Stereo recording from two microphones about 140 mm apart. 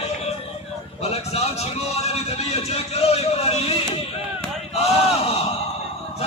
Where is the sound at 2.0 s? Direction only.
50° left (ahead or behind).